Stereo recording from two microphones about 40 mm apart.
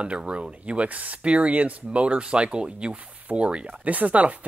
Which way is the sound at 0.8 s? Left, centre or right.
Right.